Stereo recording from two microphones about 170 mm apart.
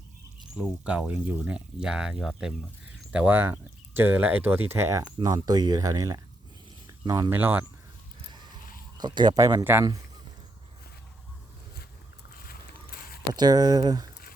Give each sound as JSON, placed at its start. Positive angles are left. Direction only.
{"t": 0.5, "sound": "speech", "side_deg": -5}
{"t": 9.0, "sound": "speech", "side_deg": -25}
{"t": 12.3, "sound": "a sound", "side_deg": 60}
{"t": 13.3, "sound": "speech", "side_deg": -25}